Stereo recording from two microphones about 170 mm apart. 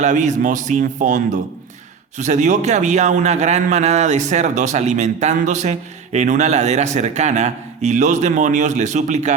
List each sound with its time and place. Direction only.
0.0 s a man's voice: 45° right (ahead or behind)